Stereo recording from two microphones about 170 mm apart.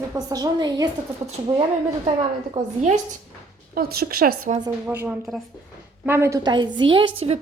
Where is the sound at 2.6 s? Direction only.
45° right (ahead or behind).